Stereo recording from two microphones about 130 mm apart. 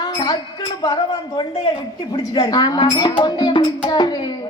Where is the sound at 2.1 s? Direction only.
30° left (ahead or behind).